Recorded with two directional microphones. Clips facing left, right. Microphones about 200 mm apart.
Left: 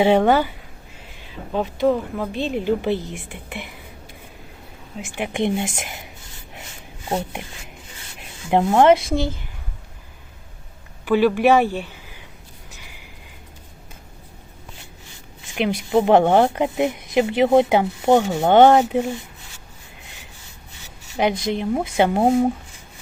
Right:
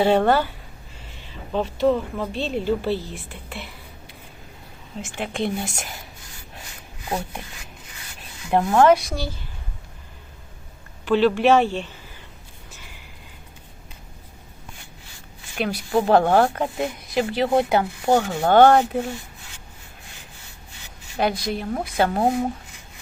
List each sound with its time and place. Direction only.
0.0 s a woman's voice: 15° left (ahead or behind)
1.5 s a woman's voice: 10° left (ahead or behind)
4.9 s a woman's voice: 10° left (ahead or behind)
7.1 s speech: 25° left (ahead or behind)
8.4 s speech: 20° left (ahead or behind)
11.0 s speech: 10° left (ahead or behind)
15.5 s speech: 20° left (ahead or behind)
21.2 s speech: 20° left (ahead or behind)